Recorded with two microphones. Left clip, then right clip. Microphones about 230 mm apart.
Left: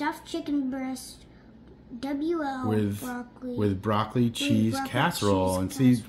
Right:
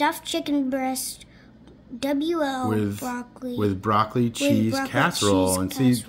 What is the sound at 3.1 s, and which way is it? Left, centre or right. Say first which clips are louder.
Speech: right 4 dB; right.